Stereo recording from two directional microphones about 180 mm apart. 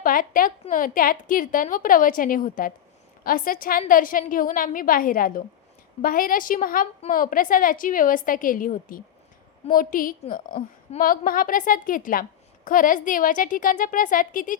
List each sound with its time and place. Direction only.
0.0 s a woman's voice: 50° left (ahead or behind)